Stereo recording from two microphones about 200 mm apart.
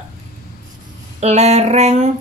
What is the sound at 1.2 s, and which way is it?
Speech, 35° right (ahead or behind).